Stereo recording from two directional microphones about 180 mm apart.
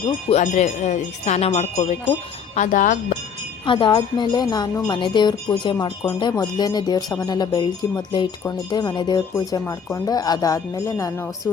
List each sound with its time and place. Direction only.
0.0 s speech: 35° left (ahead or behind)
0.4 s speech: 45° left (ahead or behind)
3.7 s speech: 25° left (ahead or behind)